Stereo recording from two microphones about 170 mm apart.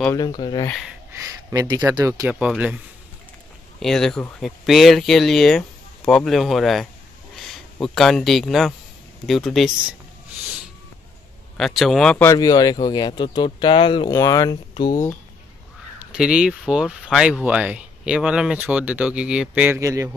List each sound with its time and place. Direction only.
0.1 s speech: 25° left (ahead or behind)
1.1 s speech: 20° right (ahead or behind)
2.3 s speech: 5° right (ahead or behind)
3.8 s speech: centre (ahead or behind)
11.5 s speech: centre (ahead or behind)
12.3 s speech: 20° left (ahead or behind)
14.1 s speech: 20° left (ahead or behind)
16.1 s speech: 5° right (ahead or behind)